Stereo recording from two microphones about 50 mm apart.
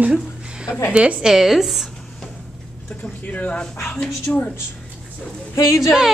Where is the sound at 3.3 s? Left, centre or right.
Left.